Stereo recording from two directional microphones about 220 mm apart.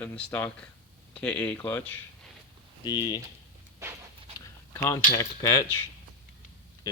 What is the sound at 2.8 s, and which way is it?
Speech, 20° left (ahead or behind).